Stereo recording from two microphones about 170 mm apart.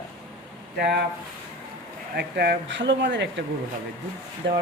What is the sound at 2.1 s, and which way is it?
Speech, 70° right (ahead or behind).